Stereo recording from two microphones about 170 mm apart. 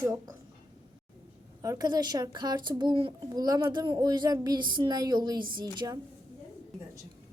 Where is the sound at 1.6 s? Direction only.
20° right (ahead or behind).